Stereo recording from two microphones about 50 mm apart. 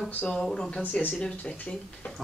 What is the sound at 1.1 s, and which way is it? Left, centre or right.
Speech, left.